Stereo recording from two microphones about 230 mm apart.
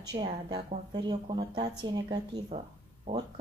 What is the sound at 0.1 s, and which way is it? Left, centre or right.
Speech, right.